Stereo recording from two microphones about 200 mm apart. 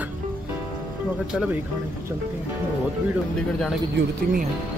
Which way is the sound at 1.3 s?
5° right (ahead or behind).